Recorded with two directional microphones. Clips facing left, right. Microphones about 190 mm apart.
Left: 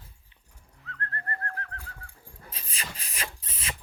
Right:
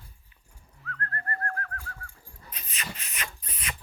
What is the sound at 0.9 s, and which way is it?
Dog, 25° left (ahead or behind).